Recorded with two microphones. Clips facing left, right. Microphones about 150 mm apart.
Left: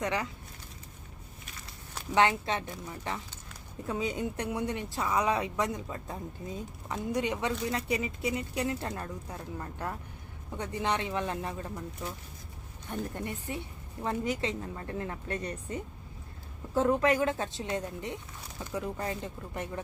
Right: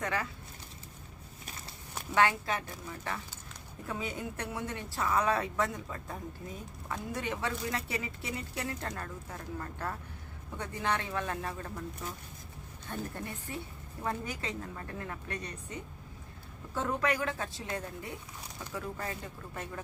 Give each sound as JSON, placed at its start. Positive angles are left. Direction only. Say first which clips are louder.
{"t": 0.0, "sound": "a woman's voice", "louder": "left 3 dB", "side_deg": 15}
{"t": 2.1, "sound": "a woman's voice", "louder": "left 2 dB", "side_deg": 20}
{"t": 12.9, "sound": "a woman's voice", "louder": "left 3 dB", "side_deg": 15}